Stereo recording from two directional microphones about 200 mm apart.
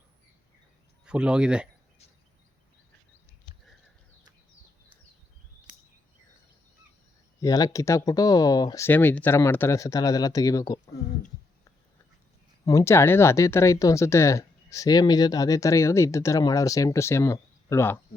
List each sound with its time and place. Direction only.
1.0 s speech: 5° right (ahead or behind)
7.4 s speech: 20° left (ahead or behind)
12.6 s speech: 15° left (ahead or behind)